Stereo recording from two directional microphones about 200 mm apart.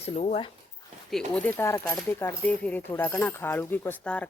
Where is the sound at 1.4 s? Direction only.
10° left (ahead or behind).